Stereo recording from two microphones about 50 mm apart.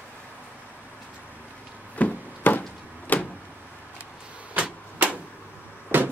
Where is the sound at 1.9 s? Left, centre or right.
Left.